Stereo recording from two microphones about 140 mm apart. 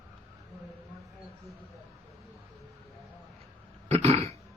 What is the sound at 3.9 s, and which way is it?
Cough, 45° right (ahead or behind).